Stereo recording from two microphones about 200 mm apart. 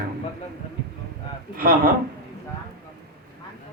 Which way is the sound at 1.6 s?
45° right (ahead or behind).